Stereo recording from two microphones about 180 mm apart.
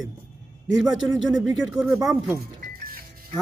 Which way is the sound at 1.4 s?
20° right (ahead or behind).